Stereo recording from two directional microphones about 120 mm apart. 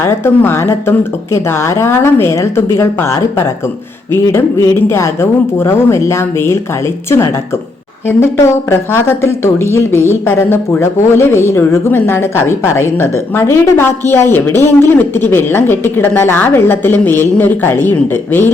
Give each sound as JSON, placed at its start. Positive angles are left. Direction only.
{"t": 0.0, "sound": "a woman's voice", "side_deg": 20}
{"t": 8.7, "sound": "a woman's voice", "side_deg": 20}